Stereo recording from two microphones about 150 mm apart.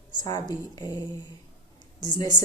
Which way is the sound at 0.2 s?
25° left (ahead or behind).